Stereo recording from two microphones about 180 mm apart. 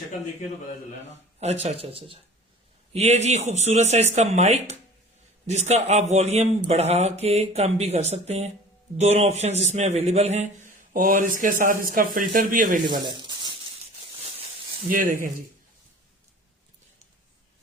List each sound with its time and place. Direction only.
1.4 s a man's voice: 35° right (ahead or behind)
12.8 s a sound: 25° right (ahead or behind)
14.8 s a man's voice: 50° right (ahead or behind)